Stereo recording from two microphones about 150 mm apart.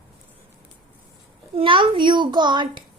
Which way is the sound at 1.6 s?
35° right (ahead or behind).